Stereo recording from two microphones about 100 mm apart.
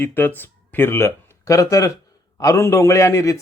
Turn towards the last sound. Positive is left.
turn(degrees=30)  # may be behind; listen again after turning